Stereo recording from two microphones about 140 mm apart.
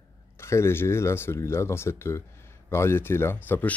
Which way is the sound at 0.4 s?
20° left (ahead or behind).